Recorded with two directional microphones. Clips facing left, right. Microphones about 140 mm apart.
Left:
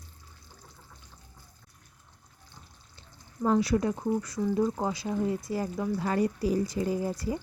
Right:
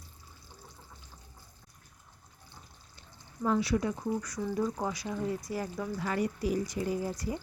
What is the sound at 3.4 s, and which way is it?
Speech, 40° left (ahead or behind).